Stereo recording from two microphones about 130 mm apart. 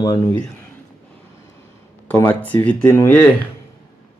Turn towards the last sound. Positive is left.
turn(degrees=15)  # may be behind; listen again after turning